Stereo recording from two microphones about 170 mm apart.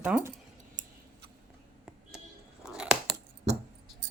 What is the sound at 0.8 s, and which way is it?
Scissors, 50° right (ahead or behind).